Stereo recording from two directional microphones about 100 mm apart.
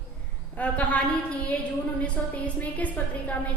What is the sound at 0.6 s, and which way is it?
A woman's voice, 15° left (ahead or behind).